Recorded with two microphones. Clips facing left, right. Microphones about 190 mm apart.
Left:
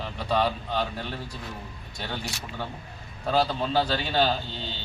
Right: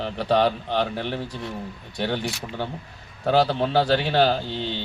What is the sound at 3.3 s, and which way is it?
Speech, 70° right (ahead or behind).